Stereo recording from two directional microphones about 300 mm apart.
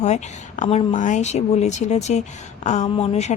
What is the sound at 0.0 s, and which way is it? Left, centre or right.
A woman's voice, left.